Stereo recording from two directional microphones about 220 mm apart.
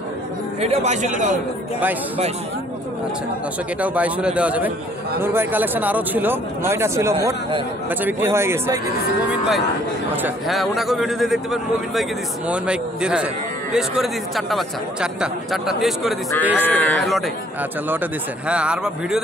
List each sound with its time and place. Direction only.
0.6 s a man's voice: 30° right (ahead or behind)
3.8 s speech: 5° right (ahead or behind)
10.2 s speech: centre (ahead or behind)
18.5 s speech: 5° right (ahead or behind)